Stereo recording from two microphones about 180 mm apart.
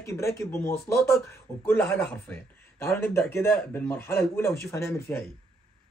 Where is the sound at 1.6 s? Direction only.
10° left (ahead or behind).